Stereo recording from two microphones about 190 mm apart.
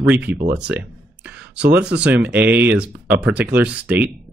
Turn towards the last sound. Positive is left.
turn(degrees=-10)  # may be behind; listen again after turning